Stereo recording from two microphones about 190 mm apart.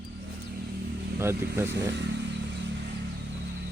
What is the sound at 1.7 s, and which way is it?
Speech, 65° right (ahead or behind).